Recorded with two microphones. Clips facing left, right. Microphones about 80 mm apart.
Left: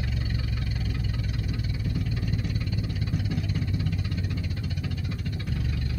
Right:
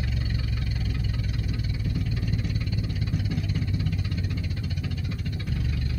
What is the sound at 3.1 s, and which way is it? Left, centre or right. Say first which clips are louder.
Vehicle: even; left.